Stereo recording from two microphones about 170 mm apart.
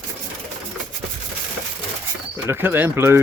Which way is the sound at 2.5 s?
10° right (ahead or behind).